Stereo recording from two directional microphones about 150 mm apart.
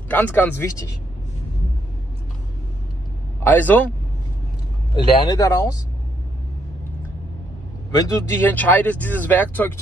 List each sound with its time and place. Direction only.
0.1 s speech: 15° left (ahead or behind)
3.4 s speech: 10° left (ahead or behind)
4.9 s speech: 30° left (ahead or behind)
7.9 s speech: 25° left (ahead or behind)
8.4 s speech: 10° left (ahead or behind)